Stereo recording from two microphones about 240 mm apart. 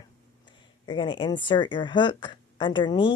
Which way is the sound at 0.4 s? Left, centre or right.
Centre.